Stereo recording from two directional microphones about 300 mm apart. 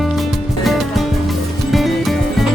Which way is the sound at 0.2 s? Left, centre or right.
Centre.